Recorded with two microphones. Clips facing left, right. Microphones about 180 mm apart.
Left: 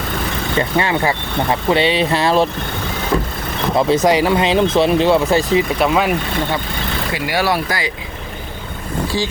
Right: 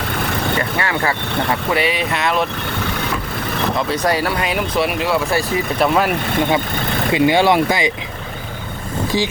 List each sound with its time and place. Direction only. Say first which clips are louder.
0.6 s speech: left 3 dB; 20° left (ahead or behind)
3.8 s speech: left 7 dB; 25° left (ahead or behind)
5.8 s speech: even; centre (ahead or behind)
7.1 s speech: right 6 dB; 20° right (ahead or behind)